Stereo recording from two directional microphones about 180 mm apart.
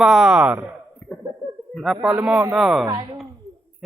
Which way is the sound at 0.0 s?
5° right (ahead or behind).